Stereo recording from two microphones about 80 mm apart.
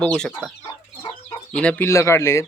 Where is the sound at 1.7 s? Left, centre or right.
Left.